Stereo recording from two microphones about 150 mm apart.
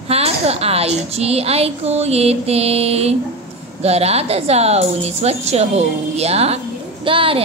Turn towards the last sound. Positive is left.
turn(degrees=-35)  # may be behind; listen again after turning